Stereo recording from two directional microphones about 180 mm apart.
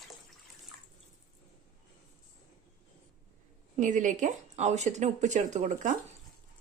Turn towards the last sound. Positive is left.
turn(degrees=-40)  # may be behind; listen again after turning